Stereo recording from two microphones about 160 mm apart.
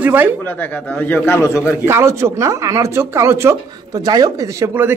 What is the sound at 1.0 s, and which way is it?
Speech, 10° left (ahead or behind).